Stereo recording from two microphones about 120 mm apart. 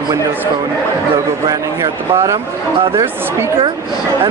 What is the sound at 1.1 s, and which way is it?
A man's voice, 25° right (ahead or behind).